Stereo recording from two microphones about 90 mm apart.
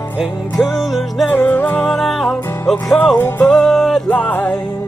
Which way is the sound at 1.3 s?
20° left (ahead or behind).